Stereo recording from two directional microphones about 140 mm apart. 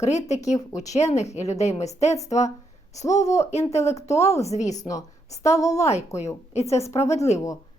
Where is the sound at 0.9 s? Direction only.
50° left (ahead or behind).